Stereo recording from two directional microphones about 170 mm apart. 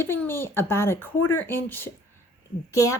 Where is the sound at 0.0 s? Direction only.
15° left (ahead or behind).